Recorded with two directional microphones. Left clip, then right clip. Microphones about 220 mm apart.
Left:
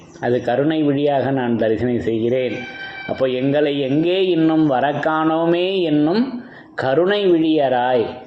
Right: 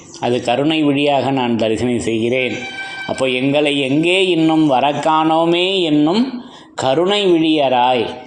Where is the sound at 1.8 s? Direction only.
30° right (ahead or behind).